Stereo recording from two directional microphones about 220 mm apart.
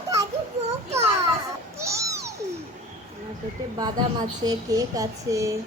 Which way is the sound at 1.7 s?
15° right (ahead or behind).